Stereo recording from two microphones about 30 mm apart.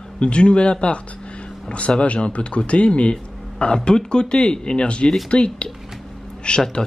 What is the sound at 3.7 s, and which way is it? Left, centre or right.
A man's voice, left.